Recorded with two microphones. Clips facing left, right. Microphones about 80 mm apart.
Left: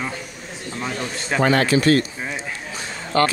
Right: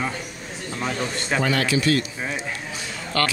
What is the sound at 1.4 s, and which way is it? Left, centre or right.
Speech, left.